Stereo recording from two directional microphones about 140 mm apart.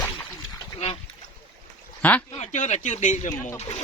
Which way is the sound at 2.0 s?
10° left (ahead or behind).